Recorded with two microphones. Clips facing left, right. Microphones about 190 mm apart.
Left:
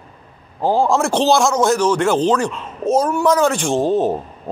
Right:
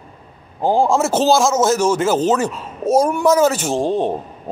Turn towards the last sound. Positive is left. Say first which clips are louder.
# left 2 dB
turn(degrees=5)  # may be behind; listen again after turning